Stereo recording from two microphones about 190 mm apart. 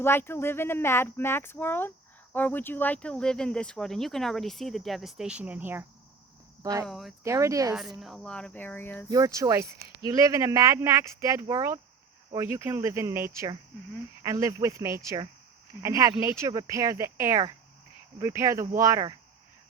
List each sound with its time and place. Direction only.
0.0 s speech: 10° left (ahead or behind); by 6.8 s 20° right (ahead or behind)
6.8 s speech: centre (ahead or behind)
7.3 s speech: 15° right (ahead or behind)
7.8 s speech: centre (ahead or behind)
9.0 s speech: 20° right (ahead or behind)